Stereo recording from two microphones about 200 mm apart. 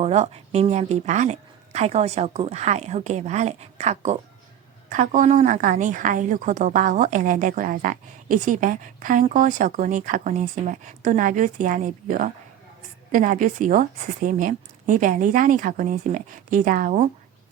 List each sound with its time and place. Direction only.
0.0 s a woman's voice: 35° right (ahead or behind)